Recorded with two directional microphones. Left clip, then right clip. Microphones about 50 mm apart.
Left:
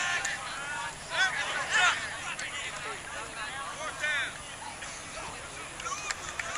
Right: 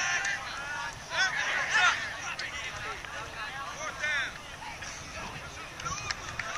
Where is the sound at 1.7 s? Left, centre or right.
Right.